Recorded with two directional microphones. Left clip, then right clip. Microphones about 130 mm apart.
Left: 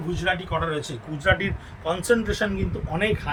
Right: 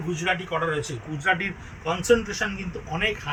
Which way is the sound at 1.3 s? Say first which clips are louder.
Left 2 dB; 35° left (ahead or behind).